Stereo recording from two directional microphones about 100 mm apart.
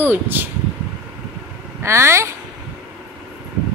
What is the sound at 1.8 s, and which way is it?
Speech, 25° right (ahead or behind).